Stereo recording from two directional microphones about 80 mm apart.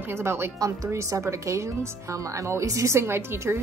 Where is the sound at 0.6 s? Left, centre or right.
Right.